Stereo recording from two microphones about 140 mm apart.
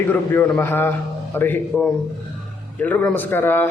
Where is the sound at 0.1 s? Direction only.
15° left (ahead or behind).